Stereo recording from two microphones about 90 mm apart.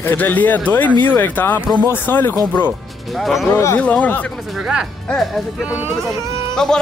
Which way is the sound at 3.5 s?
35° left (ahead or behind).